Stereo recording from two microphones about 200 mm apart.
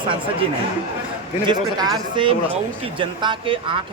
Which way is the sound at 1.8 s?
20° right (ahead or behind).